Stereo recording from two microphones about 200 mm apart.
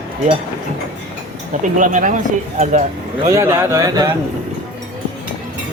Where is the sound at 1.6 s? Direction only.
40° right (ahead or behind).